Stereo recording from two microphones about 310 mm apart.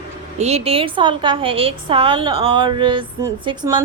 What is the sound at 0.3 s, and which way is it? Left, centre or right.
A woman's voice, centre.